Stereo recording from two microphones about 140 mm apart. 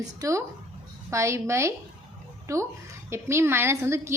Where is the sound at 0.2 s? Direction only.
20° right (ahead or behind).